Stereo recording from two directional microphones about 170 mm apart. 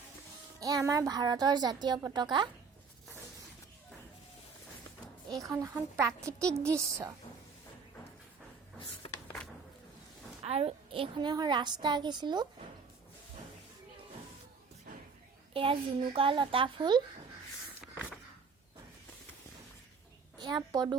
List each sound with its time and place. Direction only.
0.6 s a woman's voice: 20° right (ahead or behind)
5.3 s speech: 20° right (ahead or behind)
6.4 s a woman's voice: 5° left (ahead or behind)
9.2 s a sound: 5° left (ahead or behind)
10.4 s a woman's voice: 35° right (ahead or behind)
15.5 s a child's voice: 30° right (ahead or behind)
20.4 s a woman's voice: 25° right (ahead or behind)